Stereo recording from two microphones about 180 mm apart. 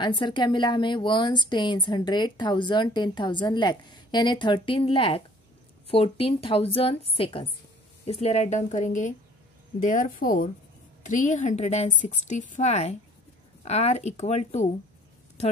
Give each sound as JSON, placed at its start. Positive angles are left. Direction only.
{"t": 0.0, "sound": "a woman's voice", "side_deg": 25}